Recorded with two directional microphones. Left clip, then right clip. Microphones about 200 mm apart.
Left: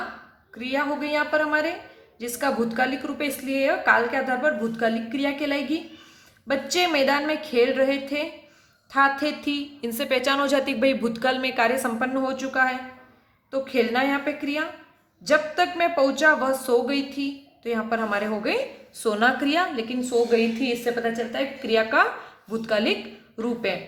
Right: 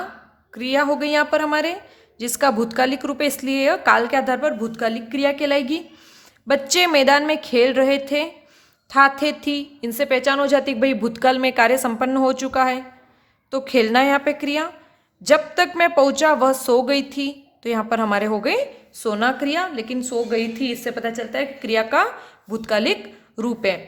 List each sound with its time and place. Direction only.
0.5 s a woman's voice: 45° right (ahead or behind); by 20.0 s 25° right (ahead or behind)
20.0 s a woman's voice: 35° right (ahead or behind)